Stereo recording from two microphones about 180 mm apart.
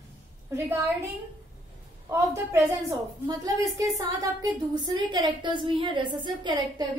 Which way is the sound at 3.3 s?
20° right (ahead or behind).